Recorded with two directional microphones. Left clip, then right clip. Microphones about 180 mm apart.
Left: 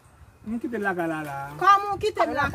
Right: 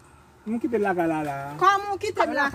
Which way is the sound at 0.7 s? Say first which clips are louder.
Right 3 dB; 5° right (ahead or behind).